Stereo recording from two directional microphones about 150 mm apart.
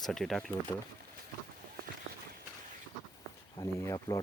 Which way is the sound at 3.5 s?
20° left (ahead or behind).